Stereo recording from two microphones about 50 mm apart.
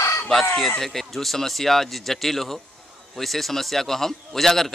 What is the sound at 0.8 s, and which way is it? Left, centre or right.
A man's voice, centre.